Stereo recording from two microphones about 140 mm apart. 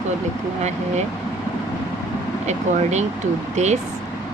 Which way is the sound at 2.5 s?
55° right (ahead or behind).